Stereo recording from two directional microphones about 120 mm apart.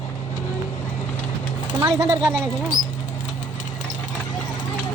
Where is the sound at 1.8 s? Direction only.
30° right (ahead or behind).